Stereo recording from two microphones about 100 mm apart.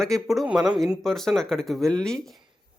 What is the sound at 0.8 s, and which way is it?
Speech, centre (ahead or behind).